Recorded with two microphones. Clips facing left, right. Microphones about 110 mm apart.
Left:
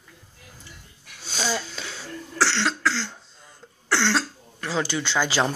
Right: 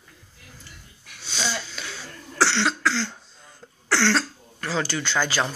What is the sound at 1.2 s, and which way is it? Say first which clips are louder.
Wheeze: left 2 dB; 45° left (ahead or behind).